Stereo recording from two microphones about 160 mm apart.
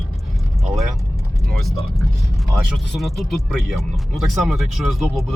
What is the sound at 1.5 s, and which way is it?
Speech, centre (ahead or behind).